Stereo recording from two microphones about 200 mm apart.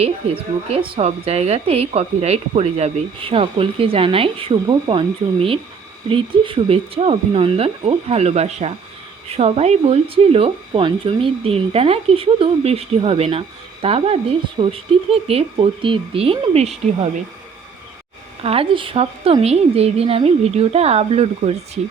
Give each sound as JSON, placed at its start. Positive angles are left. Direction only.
{"t": 0.7, "sound": "a woman's voice", "side_deg": -30}
{"t": 18.4, "sound": "a woman's voice", "side_deg": -30}